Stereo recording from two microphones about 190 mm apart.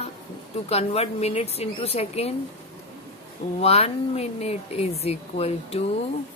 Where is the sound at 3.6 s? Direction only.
35° left (ahead or behind).